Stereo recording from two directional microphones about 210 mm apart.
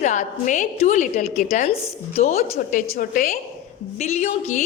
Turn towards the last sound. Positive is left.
turn(degrees=30)  # may be behind; listen again after turning